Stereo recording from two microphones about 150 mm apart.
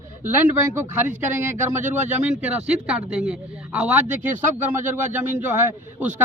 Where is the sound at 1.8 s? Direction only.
55° right (ahead or behind).